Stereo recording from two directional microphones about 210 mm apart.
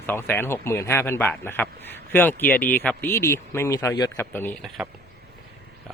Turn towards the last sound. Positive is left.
turn(degrees=10)  # may be behind; listen again after turning